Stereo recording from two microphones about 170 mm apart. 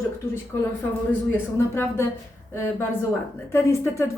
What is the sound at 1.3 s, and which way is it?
A woman's voice, 15° left (ahead or behind).